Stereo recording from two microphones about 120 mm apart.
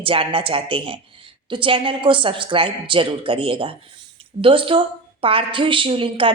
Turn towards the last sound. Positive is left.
turn(degrees=-50)  # may be behind; listen again after turning